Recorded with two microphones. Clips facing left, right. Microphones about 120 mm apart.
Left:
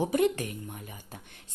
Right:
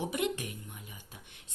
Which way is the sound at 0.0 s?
45° left (ahead or behind).